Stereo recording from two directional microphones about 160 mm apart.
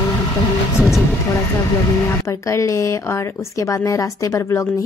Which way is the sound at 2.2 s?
20° left (ahead or behind).